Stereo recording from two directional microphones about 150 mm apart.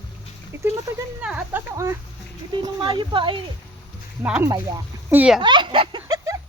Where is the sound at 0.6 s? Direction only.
20° right (ahead or behind).